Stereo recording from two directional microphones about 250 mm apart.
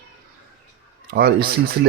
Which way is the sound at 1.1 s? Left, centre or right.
Right.